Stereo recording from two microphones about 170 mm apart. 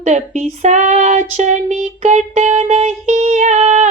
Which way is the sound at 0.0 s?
45° right (ahead or behind).